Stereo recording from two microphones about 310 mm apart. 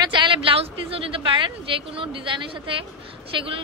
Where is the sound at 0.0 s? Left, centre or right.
Centre.